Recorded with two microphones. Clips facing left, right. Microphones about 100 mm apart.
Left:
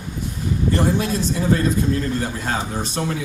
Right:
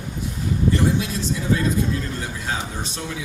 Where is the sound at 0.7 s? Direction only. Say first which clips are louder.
Left 4 dB; 50° left (ahead or behind).